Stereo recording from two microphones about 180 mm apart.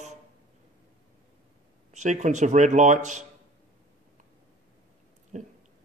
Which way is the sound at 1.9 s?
40° right (ahead or behind).